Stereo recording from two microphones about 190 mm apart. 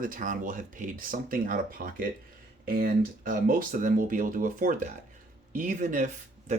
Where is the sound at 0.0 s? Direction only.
45° right (ahead or behind).